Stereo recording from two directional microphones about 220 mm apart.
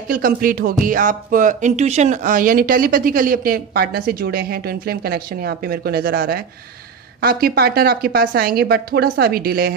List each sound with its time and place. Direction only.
0.1 s a woman's voice: 40° right (ahead or behind)